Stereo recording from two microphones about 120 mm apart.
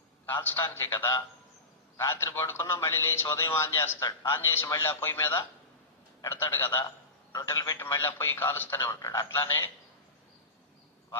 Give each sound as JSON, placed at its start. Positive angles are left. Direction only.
{"t": 0.3, "sound": "a man's voice", "side_deg": 20}